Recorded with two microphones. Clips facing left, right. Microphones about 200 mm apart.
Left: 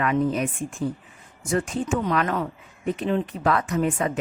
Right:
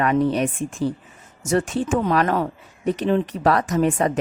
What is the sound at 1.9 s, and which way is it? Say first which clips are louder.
Speech: right 4 dB; 40° right (ahead or behind).